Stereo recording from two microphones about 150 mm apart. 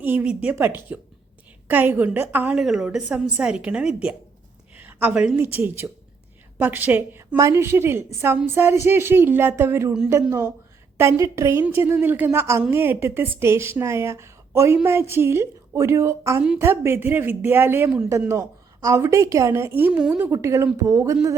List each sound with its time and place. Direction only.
0.0 s a woman's voice: 10° right (ahead or behind)